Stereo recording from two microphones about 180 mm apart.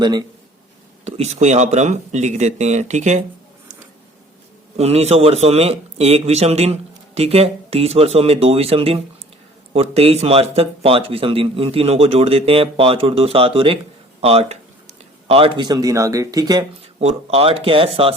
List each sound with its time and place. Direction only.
0.0 s speech: 25° right (ahead or behind)
1.0 s a man's voice: 35° right (ahead or behind)
4.8 s a man's voice: 35° right (ahead or behind)
17.0 s a man's voice: 35° right (ahead or behind)